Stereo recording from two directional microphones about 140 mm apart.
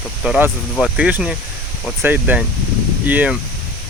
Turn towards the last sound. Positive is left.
turn(degrees=-10)  # may be behind; listen again after turning